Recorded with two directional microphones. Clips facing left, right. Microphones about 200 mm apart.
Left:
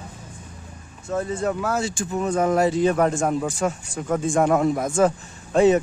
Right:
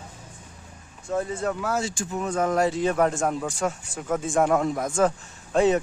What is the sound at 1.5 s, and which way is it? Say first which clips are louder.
Speech: left 3 dB; 55° left (ahead or behind).